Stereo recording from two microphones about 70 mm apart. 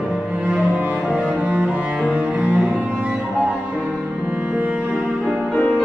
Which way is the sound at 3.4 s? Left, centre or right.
Centre.